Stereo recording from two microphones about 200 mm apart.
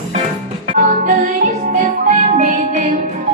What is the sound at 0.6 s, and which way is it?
Music, 35° right (ahead or behind).